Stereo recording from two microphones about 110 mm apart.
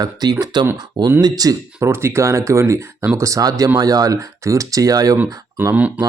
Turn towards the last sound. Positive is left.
turn(degrees=-15)  # may be behind; listen again after turning